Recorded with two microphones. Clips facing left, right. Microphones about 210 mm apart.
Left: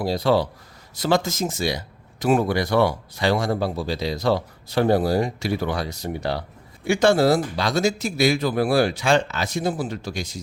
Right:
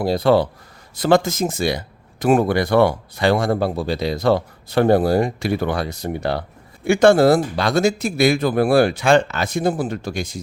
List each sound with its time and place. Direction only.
0.0 s speech: 55° right (ahead or behind)